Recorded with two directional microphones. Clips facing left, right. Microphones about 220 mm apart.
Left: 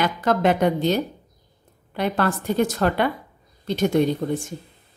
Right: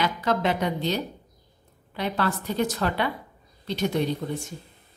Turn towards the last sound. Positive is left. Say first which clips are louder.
# left 6 dB
turn(degrees=50)  # may be behind; listen again after turning